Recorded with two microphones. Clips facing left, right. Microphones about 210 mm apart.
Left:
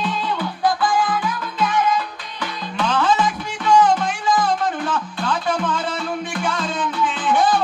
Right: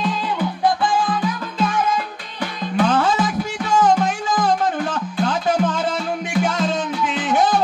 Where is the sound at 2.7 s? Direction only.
45° right (ahead or behind).